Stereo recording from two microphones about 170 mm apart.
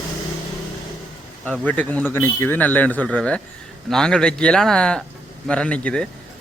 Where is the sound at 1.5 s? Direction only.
10° left (ahead or behind).